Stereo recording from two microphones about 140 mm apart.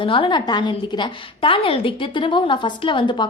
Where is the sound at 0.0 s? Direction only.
40° left (ahead or behind).